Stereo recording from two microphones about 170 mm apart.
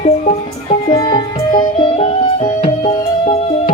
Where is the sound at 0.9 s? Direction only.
25° left (ahead or behind).